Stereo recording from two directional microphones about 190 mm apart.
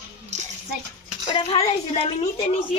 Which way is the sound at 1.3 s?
30° left (ahead or behind).